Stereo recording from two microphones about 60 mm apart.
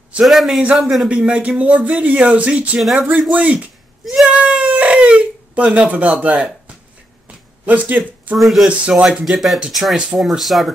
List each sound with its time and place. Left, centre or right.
0.2 s speech: centre
1.0 s speech: centre
2.8 s speech: centre
3.3 s speech: right
3.5 s a sound: centre
4.3 s speech: centre
7.2 s a sound: right
8.4 s speech: centre
8.6 s speech: centre
9.0 s speech: centre